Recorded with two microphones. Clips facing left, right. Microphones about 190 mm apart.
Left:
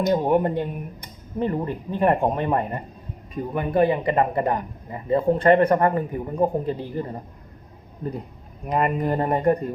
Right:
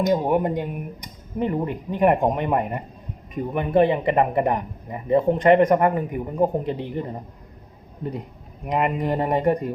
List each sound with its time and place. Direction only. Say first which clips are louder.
0.1 s speech: even; 10° right (ahead or behind)
8.6 s speech: even; 15° right (ahead or behind)